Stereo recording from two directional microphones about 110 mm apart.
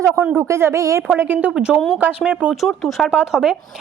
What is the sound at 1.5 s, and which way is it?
Speech, 5° right (ahead or behind).